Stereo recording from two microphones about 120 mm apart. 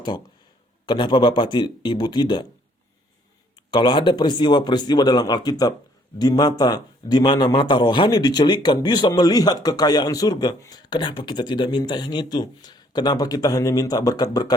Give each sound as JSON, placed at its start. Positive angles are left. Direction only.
{"t": 0.9, "sound": "a man's voice", "side_deg": 40}
{"t": 3.5, "sound": "a man's voice", "side_deg": 35}